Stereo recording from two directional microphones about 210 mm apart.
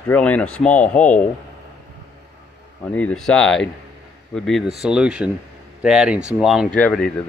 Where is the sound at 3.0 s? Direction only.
5° left (ahead or behind).